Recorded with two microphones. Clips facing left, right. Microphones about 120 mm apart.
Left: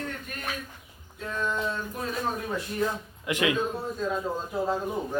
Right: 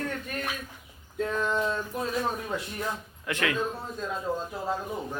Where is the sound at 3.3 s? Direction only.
15° left (ahead or behind).